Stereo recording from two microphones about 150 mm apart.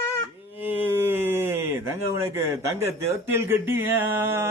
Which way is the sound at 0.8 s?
15° right (ahead or behind).